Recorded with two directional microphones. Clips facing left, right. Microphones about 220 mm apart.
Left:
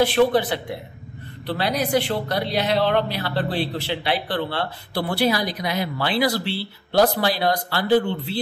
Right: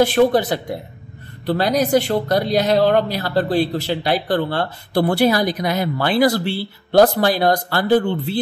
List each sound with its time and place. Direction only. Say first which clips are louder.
0.0 s a woman's voice: right 3 dB; 45° right (ahead or behind)